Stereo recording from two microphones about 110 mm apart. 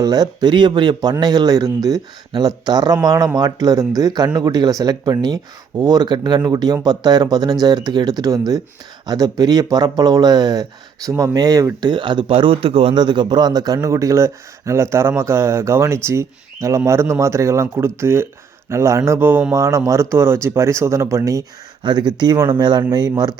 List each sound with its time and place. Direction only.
0.0 s speech: 35° right (ahead or behind); by 12.9 s 60° right (ahead or behind)
12.9 s speech: 45° right (ahead or behind)
21.8 s speech: 40° right (ahead or behind)